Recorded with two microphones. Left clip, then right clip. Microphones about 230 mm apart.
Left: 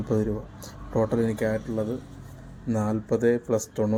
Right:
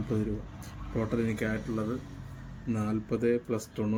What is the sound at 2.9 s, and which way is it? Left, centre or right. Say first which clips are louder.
Speech: left 5 dB; centre.